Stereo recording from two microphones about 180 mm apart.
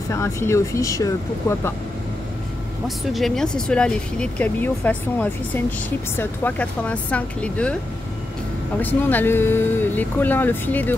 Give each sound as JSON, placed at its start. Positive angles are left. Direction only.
{"t": 0.1, "sound": "speech", "side_deg": 15}
{"t": 3.1, "sound": "speech", "side_deg": 0}
{"t": 8.8, "sound": "speech", "side_deg": 10}